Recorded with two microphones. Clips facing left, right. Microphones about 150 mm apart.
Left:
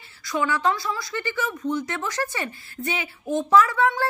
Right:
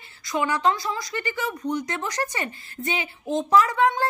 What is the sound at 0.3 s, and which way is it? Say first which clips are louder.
A woman's voice: even; 20° right (ahead or behind).